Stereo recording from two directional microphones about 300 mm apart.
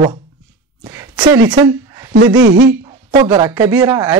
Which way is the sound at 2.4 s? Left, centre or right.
Right.